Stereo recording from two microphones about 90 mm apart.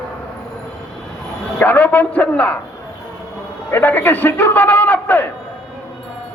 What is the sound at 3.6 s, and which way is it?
A man's voice, 25° left (ahead or behind).